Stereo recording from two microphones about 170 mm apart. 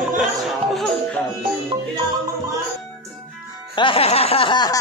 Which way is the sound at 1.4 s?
30° right (ahead or behind).